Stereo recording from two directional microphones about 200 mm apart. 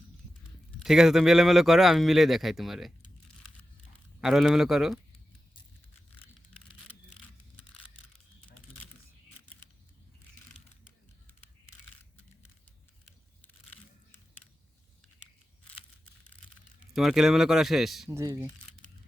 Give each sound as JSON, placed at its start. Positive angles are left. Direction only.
{"t": 0.8, "sound": "speech", "side_deg": 0}
{"t": 4.2, "sound": "speech", "side_deg": 0}
{"t": 16.9, "sound": "speech", "side_deg": 0}
{"t": 18.1, "sound": "speech", "side_deg": -15}